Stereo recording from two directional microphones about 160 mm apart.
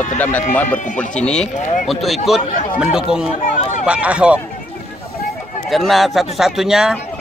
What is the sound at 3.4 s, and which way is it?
Run, 55° left (ahead or behind).